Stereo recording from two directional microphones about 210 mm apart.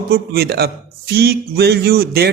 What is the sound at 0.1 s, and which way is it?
A man's voice, 50° right (ahead or behind).